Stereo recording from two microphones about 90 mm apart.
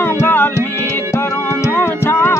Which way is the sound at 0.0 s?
25° left (ahead or behind).